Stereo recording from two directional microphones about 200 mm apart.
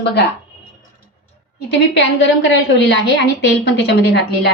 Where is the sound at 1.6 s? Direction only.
60° left (ahead or behind).